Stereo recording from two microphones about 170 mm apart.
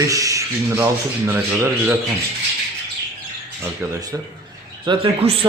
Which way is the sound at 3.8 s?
15° right (ahead or behind).